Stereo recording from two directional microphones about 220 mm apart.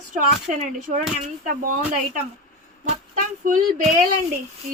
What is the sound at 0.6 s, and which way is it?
Speech, 35° right (ahead or behind).